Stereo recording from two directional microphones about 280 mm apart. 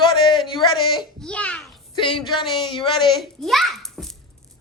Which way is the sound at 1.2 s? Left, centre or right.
Centre.